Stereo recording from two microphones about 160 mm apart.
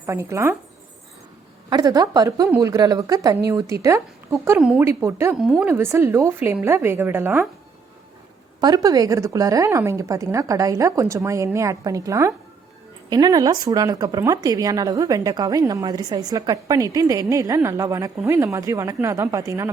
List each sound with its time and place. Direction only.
0.0 s a woman's voice: 15° right (ahead or behind)
1.7 s a woman's voice: 25° right (ahead or behind)
5.4 s a woman's voice: centre (ahead or behind)
5.6 s a woman's voice: 15° right (ahead or behind)
8.6 s speech: 25° right (ahead or behind)